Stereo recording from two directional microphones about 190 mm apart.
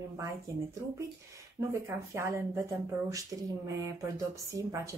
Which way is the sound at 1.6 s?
15° right (ahead or behind).